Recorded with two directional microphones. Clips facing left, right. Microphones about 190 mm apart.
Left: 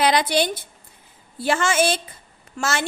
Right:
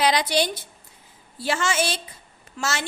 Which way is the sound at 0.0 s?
55° left (ahead or behind).